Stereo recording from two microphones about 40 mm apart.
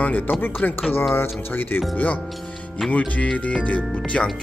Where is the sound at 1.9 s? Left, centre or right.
Left.